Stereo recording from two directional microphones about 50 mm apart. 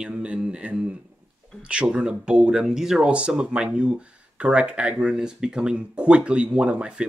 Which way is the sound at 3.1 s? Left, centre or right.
Right.